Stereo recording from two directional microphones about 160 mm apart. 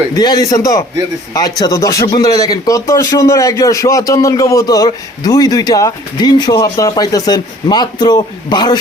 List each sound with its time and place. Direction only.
0.4 s a man's voice: 20° left (ahead or behind)